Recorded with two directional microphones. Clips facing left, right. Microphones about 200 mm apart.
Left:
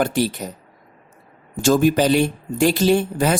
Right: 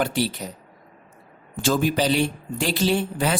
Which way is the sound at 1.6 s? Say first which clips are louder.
Left 6 dB; 45° left (ahead or behind).